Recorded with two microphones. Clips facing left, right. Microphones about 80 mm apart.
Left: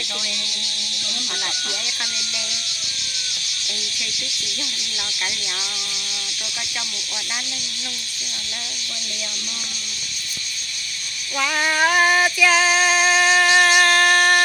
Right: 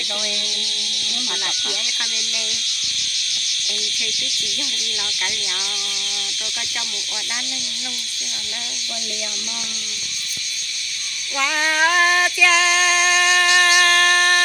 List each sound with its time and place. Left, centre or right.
1.8 s speech: left
11.3 s female singing: centre